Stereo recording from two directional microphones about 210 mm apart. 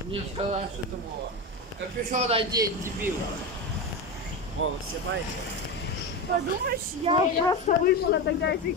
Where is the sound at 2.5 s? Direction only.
15° right (ahead or behind).